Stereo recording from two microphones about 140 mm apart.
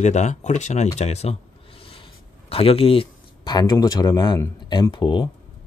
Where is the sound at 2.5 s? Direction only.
45° left (ahead or behind).